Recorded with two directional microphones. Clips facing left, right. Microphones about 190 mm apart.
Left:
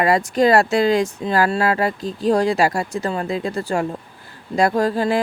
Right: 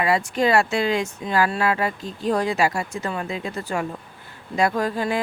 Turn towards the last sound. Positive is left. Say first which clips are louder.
# left 5 dB
turn(degrees=35)  # may be behind; listen again after turning